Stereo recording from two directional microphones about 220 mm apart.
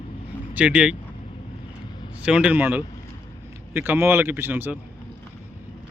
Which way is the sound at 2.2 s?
5° right (ahead or behind).